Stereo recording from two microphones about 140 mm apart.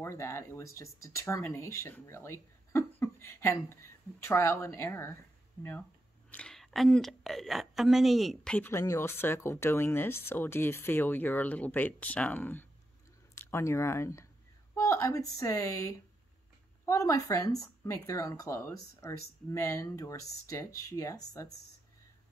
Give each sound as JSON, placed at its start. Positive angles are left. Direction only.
{"t": 0.0, "sound": "speech", "side_deg": 20}
{"t": 6.3, "sound": "a woman's voice", "side_deg": 5}
{"t": 8.5, "sound": "speech", "side_deg": 20}